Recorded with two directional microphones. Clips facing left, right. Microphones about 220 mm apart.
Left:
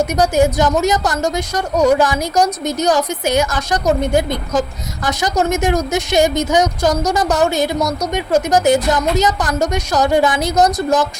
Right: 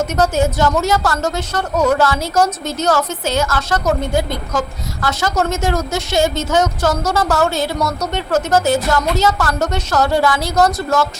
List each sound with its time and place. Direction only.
0.0 s a woman's voice: 15° left (ahead or behind)